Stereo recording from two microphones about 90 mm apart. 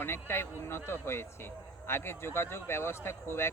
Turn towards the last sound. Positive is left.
turn(degrees=30)  # may be behind; listen again after turning